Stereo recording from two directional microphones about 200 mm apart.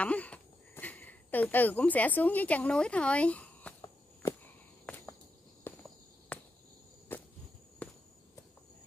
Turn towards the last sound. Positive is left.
turn(degrees=5)  # may be behind; listen again after turning